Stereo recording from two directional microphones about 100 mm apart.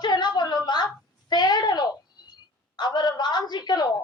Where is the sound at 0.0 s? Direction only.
45° left (ahead or behind).